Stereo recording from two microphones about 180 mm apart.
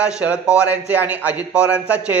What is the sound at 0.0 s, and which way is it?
Speech, 5° right (ahead or behind).